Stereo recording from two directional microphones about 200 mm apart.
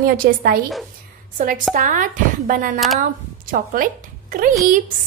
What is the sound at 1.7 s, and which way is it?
A woman's voice, 40° right (ahead or behind).